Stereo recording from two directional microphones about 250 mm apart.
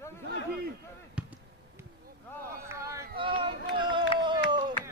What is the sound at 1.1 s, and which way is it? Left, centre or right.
Basketball bounce, centre.